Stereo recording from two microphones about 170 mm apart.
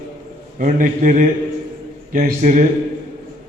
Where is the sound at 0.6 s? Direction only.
50° right (ahead or behind).